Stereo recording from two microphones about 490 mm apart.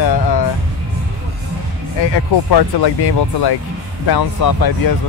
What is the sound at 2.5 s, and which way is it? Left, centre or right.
Speech, left.